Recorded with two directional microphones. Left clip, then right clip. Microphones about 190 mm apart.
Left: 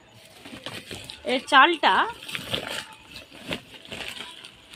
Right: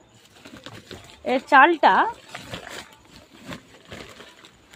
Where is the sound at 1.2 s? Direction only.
50° right (ahead or behind).